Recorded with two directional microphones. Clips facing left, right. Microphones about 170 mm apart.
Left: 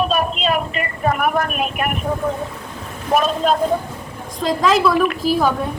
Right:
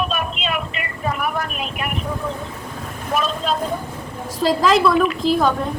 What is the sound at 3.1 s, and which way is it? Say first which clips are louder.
Speech: left 5 dB; 50° left (ahead or behind).